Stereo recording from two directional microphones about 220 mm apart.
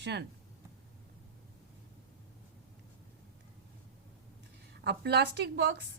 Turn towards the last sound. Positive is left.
turn(degrees=-50)  # may be behind; listen again after turning